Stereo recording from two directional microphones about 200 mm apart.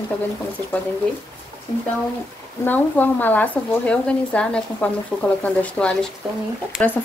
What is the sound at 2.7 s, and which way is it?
A woman's voice, 10° left (ahead or behind).